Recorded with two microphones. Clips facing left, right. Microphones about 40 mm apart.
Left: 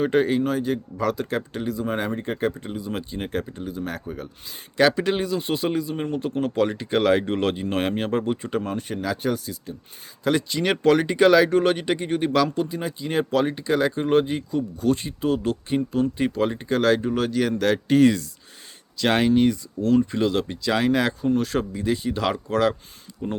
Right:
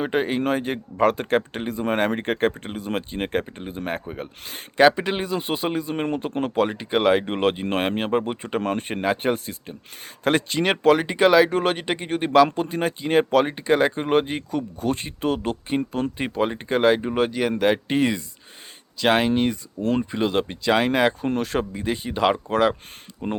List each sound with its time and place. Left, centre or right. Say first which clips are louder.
0.0 s speech: left 2 dB; right
5.9 s speech: right 1 dB; right
8.6 s speech: right 4 dB; right
10.6 s speech: right 1 dB; right
12.5 s speech: right 2 dB; right
15.9 s speech: left 3 dB; right
16.1 s speech: left 1 dB; right